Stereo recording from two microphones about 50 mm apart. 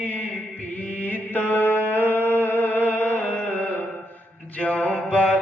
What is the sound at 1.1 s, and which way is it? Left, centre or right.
Mantra, left.